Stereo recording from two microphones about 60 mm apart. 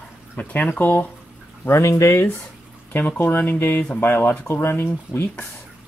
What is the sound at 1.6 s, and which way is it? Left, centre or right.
Speech, left.